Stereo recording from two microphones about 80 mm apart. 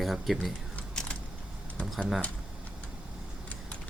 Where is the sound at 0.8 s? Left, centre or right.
Centre.